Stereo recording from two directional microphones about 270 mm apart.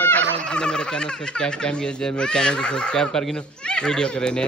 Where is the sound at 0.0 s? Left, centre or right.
Centre.